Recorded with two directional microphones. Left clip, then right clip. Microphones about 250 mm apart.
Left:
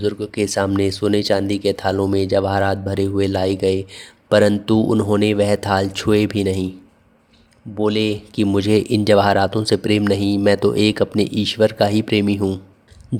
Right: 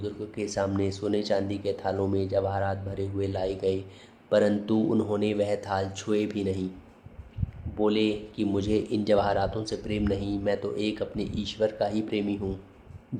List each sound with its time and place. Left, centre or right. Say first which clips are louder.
0.0 s speech: left 13 dB; left
7.8 s speech: left 6 dB; left